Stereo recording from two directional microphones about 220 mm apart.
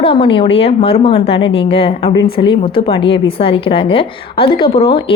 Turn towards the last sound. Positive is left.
turn(degrees=25)  # may be behind; listen again after turning